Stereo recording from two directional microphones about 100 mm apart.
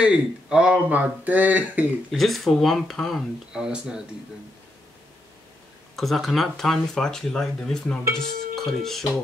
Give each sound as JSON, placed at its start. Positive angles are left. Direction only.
{"t": 0.0, "sound": "speech", "side_deg": -10}
{"t": 2.0, "sound": "speech", "side_deg": 0}
{"t": 5.9, "sound": "speech", "side_deg": 0}